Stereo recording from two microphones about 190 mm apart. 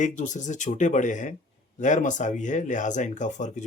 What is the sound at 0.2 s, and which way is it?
Speech, 40° left (ahead or behind).